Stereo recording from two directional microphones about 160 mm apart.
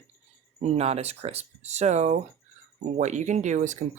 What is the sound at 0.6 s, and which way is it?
Speech, 40° right (ahead or behind).